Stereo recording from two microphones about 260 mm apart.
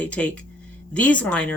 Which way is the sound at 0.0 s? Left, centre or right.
Centre.